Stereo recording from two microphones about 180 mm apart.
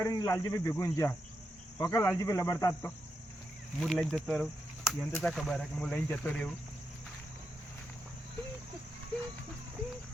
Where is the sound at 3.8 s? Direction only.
Centre (ahead or behind).